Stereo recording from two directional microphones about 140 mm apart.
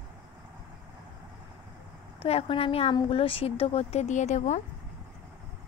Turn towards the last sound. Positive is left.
turn(degrees=55)  # may be behind; listen again after turning